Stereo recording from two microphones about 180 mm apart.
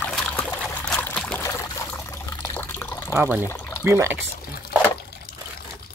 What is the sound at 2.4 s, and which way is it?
Water, 15° left (ahead or behind).